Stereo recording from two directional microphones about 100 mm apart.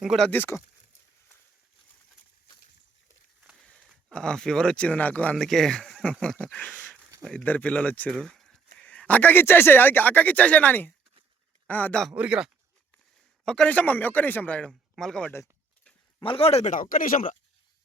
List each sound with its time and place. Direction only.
0.0 s speech: centre (ahead or behind)
0.3 s speech: 25° left (ahead or behind)
3.6 s a sound: 10° left (ahead or behind)
3.8 s speech: 10° left (ahead or behind)
8.2 s speech: 5° left (ahead or behind)
12.1 s speech: 10° right (ahead or behind)
13.4 s speech: 10° left (ahead or behind)
14.7 s speech: 5° left (ahead or behind)
16.2 s speech: 70° left (ahead or behind)